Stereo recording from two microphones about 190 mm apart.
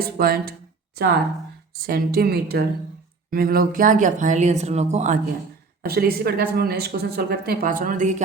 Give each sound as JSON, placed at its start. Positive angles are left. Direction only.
{"t": 0.0, "sound": "speech", "side_deg": -50}
{"t": 5.8, "sound": "speech", "side_deg": -55}